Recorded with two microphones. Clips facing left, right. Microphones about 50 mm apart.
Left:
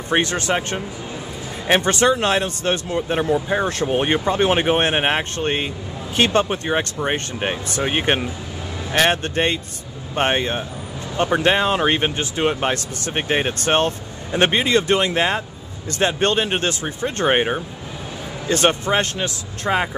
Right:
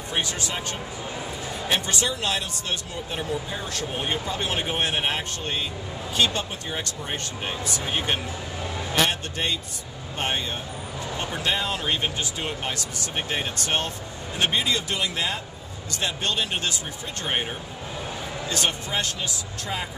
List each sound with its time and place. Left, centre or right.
0.1 s speech: left